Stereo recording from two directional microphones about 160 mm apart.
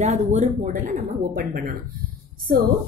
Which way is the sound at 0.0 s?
45° right (ahead or behind).